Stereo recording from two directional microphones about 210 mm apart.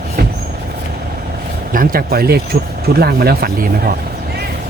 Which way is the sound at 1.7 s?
45° right (ahead or behind).